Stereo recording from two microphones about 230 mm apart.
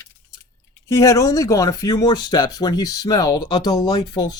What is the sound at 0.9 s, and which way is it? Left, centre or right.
Speech, centre.